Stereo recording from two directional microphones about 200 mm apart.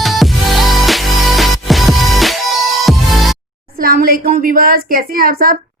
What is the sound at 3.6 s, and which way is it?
A woman's voice, 45° right (ahead or behind).